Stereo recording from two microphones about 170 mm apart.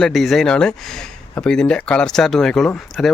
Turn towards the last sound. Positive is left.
turn(degrees=5)  # may be behind; listen again after turning